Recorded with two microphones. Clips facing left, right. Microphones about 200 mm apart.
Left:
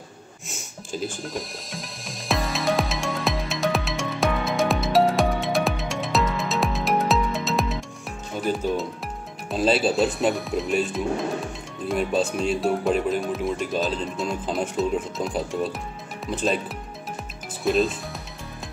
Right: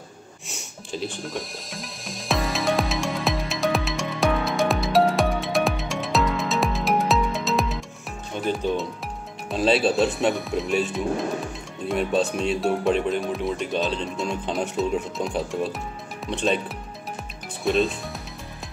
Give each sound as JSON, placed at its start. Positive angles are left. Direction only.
{"t": 0.5, "sound": "music", "side_deg": 0}
{"t": 8.4, "sound": "speech", "side_deg": 5}